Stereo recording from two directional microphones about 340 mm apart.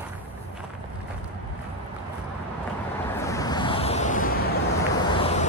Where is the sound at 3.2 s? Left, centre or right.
Centre.